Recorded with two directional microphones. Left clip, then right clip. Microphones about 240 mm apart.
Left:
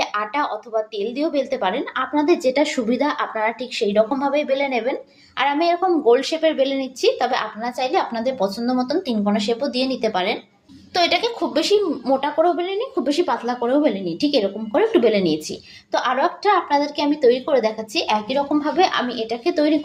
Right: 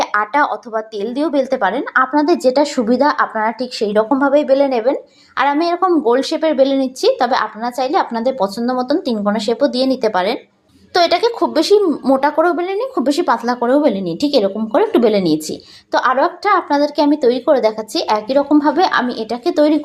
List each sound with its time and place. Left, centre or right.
0.0 s a woman's voice: right